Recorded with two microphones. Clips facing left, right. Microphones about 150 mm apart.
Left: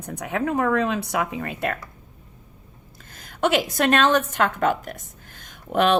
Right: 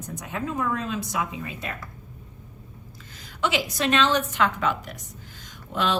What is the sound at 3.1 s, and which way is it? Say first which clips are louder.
A woman's voice: left 5 dB; 55° left (ahead or behind).